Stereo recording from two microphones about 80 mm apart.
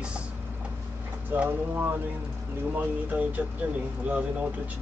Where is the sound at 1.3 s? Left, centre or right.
Right.